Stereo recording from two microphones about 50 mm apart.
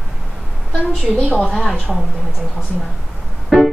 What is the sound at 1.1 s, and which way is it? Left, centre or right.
Speech, left.